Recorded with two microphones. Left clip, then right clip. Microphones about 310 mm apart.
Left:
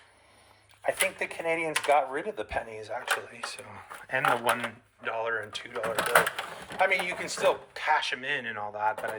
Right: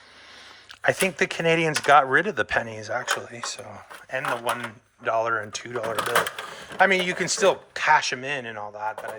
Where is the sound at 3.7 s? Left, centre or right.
Centre.